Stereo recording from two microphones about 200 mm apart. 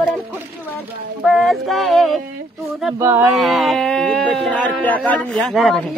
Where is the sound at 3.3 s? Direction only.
Centre (ahead or behind).